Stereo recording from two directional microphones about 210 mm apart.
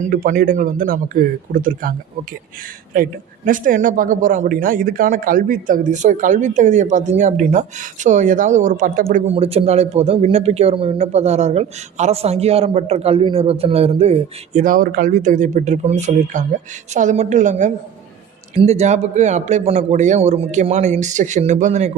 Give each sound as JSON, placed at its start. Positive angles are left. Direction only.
{"t": 0.0, "sound": "speech", "side_deg": -40}